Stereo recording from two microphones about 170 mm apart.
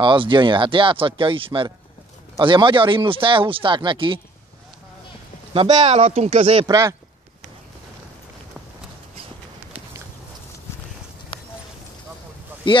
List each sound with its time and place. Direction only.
0.0 s speech: 30° right (ahead or behind)
5.5 s speech: 35° right (ahead or behind)
6.7 s speech: 20° right (ahead or behind)
12.7 s speech: 30° left (ahead or behind)